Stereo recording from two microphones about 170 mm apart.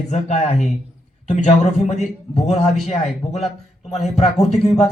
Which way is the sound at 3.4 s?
Centre (ahead or behind).